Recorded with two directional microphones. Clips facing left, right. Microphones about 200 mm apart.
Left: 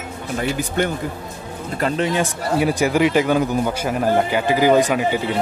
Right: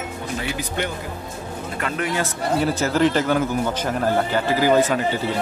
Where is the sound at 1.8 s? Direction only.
25° left (ahead or behind).